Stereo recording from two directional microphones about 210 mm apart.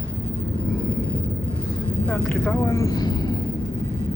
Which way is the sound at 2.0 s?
10° left (ahead or behind).